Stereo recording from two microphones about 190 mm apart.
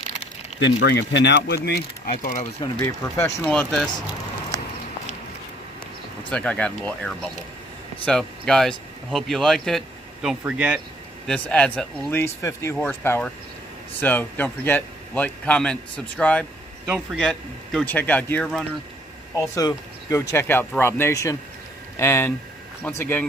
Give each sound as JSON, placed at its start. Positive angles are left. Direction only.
{"t": 0.6, "sound": "speech", "side_deg": 70}
{"t": 2.7, "sound": "a man's voice", "side_deg": 15}
{"t": 6.3, "sound": "a man's voice", "side_deg": 5}
{"t": 11.3, "sound": "a man's voice", "side_deg": 5}
{"t": 16.8, "sound": "a man's voice", "side_deg": -5}
{"t": 19.5, "sound": "a man's voice", "side_deg": 15}